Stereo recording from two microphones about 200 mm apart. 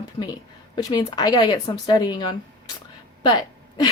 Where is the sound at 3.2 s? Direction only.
20° left (ahead or behind).